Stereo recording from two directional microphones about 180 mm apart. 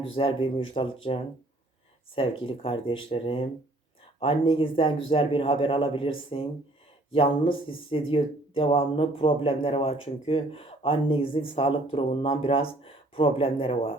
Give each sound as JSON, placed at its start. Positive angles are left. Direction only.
{"t": 0.2, "sound": "speech", "side_deg": 30}
{"t": 2.4, "sound": "speech", "side_deg": 30}